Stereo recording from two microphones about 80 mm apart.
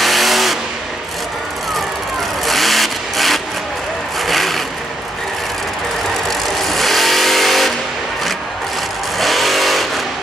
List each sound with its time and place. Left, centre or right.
0.0 s vehicle: centre
2.4 s vehicle: centre
6.4 s vehicle: centre
9.2 s vehicle: centre